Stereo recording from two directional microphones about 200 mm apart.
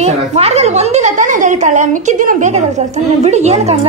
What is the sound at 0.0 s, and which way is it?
A woman's voice, 30° right (ahead or behind).